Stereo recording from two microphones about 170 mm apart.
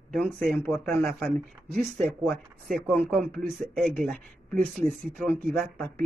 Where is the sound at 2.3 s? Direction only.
Centre (ahead or behind).